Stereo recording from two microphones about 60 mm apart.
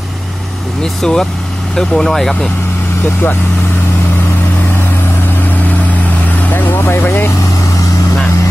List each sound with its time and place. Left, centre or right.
1.0 s speech: centre
6.5 s vehicle: left